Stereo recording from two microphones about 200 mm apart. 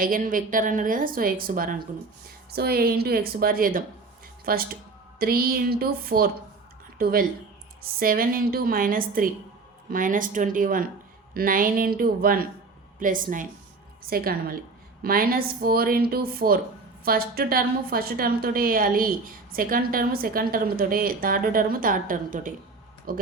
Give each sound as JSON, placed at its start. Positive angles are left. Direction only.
{"t": 0.0, "sound": "a woman's voice", "side_deg": -45}